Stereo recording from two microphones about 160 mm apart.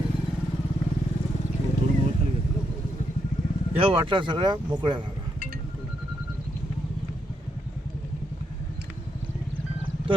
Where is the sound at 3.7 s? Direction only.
30° right (ahead or behind).